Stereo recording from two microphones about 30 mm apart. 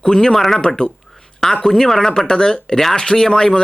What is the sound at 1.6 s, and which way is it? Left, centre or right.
Speech, centre.